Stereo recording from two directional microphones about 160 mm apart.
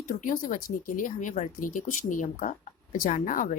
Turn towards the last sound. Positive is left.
turn(degrees=55)  # may be behind; listen again after turning